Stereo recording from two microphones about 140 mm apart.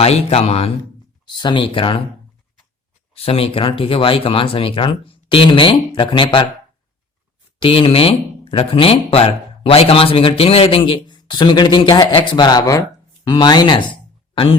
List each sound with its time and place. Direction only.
0.0 s speech: 45° left (ahead or behind)
1.2 s speech: 35° left (ahead or behind)
3.2 s speech: 45° left (ahead or behind)
7.6 s speech: 40° left (ahead or behind)